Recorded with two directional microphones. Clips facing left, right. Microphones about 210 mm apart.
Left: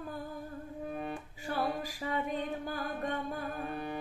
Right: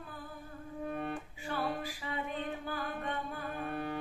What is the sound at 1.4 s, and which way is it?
Music, 40° left (ahead or behind).